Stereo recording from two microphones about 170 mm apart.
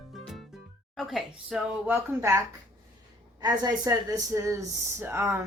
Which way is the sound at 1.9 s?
15° right (ahead or behind).